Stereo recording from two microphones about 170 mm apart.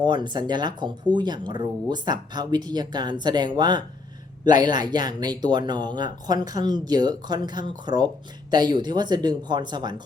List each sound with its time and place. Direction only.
0.0 s speech: 25° right (ahead or behind)